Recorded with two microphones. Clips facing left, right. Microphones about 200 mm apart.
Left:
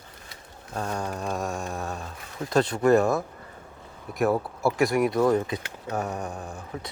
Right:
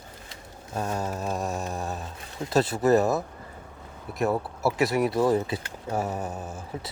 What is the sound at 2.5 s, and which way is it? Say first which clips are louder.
Speech: left 1 dB; 5° right (ahead or behind).